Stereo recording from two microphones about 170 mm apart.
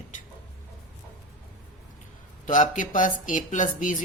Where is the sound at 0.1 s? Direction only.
45° left (ahead or behind).